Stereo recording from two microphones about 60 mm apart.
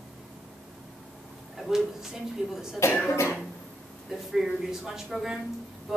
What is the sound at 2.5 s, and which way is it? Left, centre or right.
Speech, centre.